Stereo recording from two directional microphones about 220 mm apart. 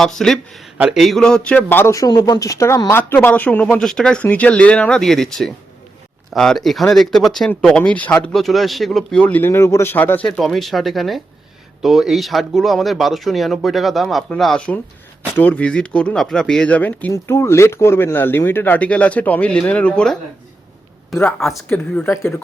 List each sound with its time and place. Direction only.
0.0 s speech: centre (ahead or behind)